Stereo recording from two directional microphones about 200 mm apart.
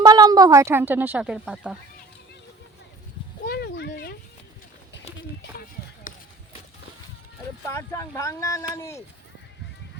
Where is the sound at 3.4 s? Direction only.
55° left (ahead or behind).